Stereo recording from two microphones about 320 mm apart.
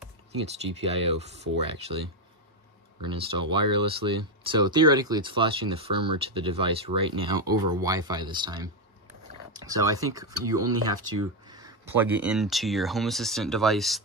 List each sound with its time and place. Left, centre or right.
0.3 s speech: centre
3.0 s speech: centre
11.4 s speech: centre